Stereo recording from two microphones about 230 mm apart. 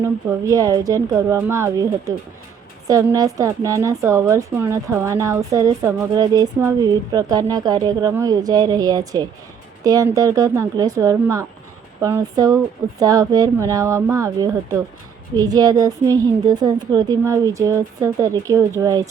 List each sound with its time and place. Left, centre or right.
0.0 s a woman's voice: centre